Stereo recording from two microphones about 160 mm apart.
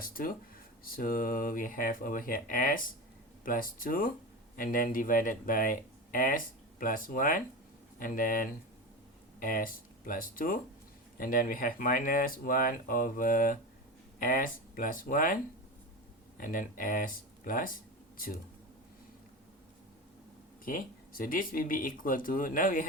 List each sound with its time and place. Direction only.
0.0 s speech: 60° left (ahead or behind)
16.4 s speech: 60° left (ahead or behind)
20.7 s speech: 60° left (ahead or behind)